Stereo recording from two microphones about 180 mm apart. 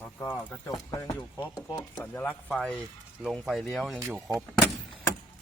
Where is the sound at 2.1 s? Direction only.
5° left (ahead or behind).